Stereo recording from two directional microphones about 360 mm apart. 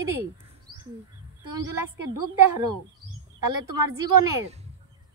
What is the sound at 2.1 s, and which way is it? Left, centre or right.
A woman's voice, right.